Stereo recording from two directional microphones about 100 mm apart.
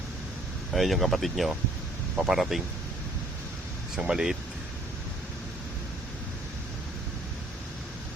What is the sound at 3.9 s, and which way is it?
Speech, 5° right (ahead or behind).